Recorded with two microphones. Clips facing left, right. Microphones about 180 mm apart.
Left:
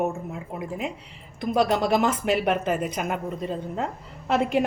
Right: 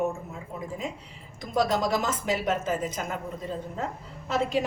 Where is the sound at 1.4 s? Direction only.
65° left (ahead or behind).